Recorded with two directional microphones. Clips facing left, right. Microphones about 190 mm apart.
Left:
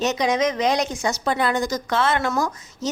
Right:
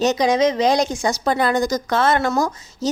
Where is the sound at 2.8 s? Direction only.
35° right (ahead or behind).